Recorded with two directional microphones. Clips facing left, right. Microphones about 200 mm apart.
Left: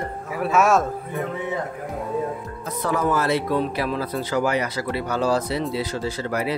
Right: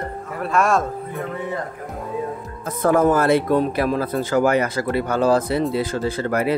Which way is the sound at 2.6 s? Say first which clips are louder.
Right 7 dB; 50° right (ahead or behind).